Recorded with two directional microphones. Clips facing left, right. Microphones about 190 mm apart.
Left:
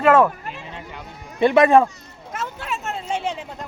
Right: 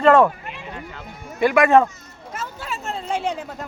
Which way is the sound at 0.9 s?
25° left (ahead or behind).